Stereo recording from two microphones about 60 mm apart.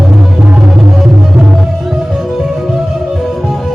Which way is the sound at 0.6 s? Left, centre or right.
Centre.